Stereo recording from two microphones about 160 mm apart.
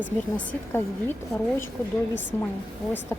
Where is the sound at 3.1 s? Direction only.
15° left (ahead or behind).